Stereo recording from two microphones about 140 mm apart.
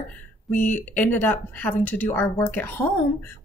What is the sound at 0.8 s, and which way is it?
Speech, 15° left (ahead or behind).